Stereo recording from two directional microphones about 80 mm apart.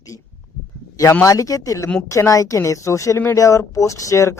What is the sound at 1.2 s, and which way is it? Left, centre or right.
Speech, left.